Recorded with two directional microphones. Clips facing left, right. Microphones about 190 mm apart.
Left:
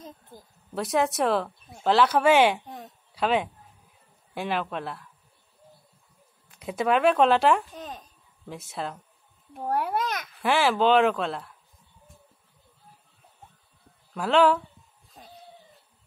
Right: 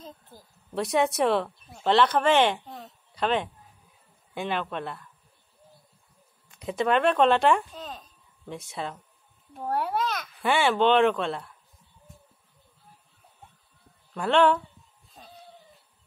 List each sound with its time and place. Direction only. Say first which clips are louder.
0.7 s speech: right 1 dB; centre (ahead or behind)
6.5 s speech: even; 5° left (ahead or behind)
7.7 s a sound: left 1 dB; 15° left (ahead or behind)
8.5 s speech: even; centre (ahead or behind)
9.8 s a child's voice: even; 15° left (ahead or behind)
10.4 s speech: even; centre (ahead or behind)
14.1 s speech: left 1 dB; 5° left (ahead or behind)